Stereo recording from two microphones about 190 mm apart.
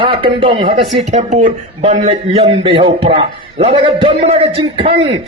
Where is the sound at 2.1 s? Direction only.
30° right (ahead or behind).